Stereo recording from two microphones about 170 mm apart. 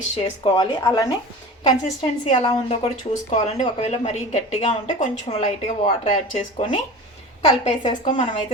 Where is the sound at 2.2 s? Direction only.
30° left (ahead or behind).